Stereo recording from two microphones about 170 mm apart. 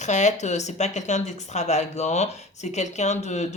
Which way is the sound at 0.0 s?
45° left (ahead or behind).